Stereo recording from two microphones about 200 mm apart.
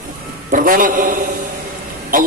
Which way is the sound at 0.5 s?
45° right (ahead or behind).